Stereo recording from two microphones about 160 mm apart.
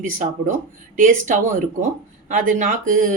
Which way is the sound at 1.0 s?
50° right (ahead or behind).